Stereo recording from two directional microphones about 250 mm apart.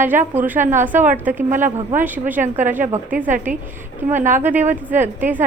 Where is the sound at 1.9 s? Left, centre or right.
Centre.